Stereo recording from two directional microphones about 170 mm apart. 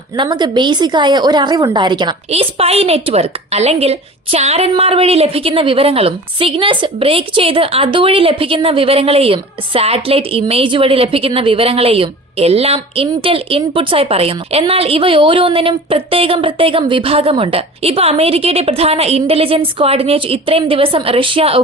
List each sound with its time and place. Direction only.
0.2 s a woman's voice: 25° right (ahead or behind)